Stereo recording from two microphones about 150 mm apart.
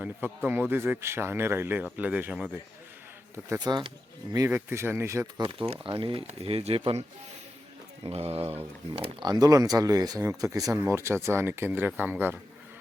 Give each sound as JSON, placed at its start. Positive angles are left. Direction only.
{"t": 0.0, "sound": "speech", "side_deg": -10}
{"t": 3.3, "sound": "speech", "side_deg": -20}
{"t": 5.4, "sound": "speech", "side_deg": -35}
{"t": 8.0, "sound": "speech", "side_deg": -40}
{"t": 9.3, "sound": "speech", "side_deg": -25}